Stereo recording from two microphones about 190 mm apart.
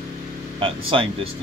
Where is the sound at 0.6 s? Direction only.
30° right (ahead or behind).